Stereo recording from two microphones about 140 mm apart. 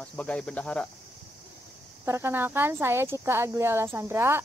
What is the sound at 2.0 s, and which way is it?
Speech, 15° right (ahead or behind).